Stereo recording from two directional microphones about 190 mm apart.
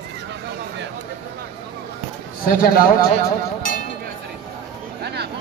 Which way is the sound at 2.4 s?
50° left (ahead or behind).